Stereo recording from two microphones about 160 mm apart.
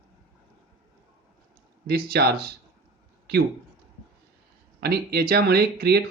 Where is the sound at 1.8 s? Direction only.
85° right.